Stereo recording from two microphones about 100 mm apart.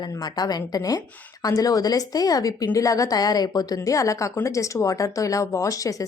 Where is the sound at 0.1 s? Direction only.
40° left (ahead or behind).